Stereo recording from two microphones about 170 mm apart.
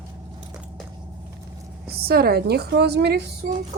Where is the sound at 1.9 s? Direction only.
65° right (ahead or behind).